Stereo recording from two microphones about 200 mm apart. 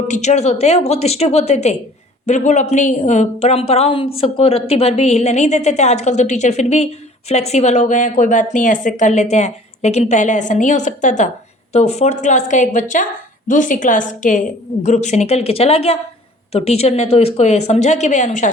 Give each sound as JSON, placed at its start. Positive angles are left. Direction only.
{"t": 0.1, "sound": "a woman's voice", "side_deg": 35}